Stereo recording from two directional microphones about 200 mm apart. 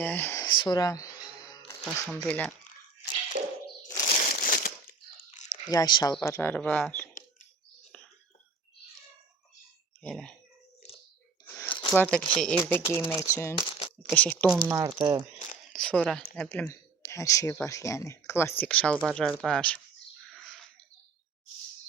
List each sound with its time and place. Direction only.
0.0 s music: 10° left (ahead or behind)
1.8 s speech: 5° left (ahead or behind)
4.1 s crunch: 45° left (ahead or behind)
5.6 s speech: 20° left (ahead or behind)
7.9 s whispering: 5° left (ahead or behind)
10.0 s a sound: 5° left (ahead or behind)
11.4 s a sound: 15° left (ahead or behind)
11.7 s crumpling: 25° left (ahead or behind)
11.9 s speech: 5° left (ahead or behind)
13.6 s a sound: 25° left (ahead or behind)
14.1 s speech: centre (ahead or behind)
14.7 s speech: 20° right (ahead or behind)
15.7 s speech: centre (ahead or behind)
20.2 s a sound: centre (ahead or behind)